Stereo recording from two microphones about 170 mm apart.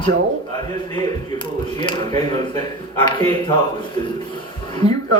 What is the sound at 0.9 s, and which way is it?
Speech, 25° left (ahead or behind).